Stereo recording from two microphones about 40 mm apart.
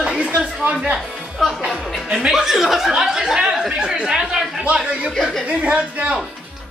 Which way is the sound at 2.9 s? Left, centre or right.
Centre.